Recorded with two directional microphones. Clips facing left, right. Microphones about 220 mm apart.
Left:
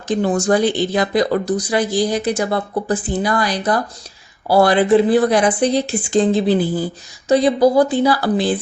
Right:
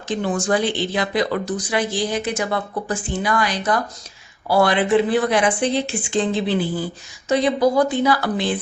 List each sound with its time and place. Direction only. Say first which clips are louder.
0.1 s speech: left 5 dB; 40° left (ahead or behind)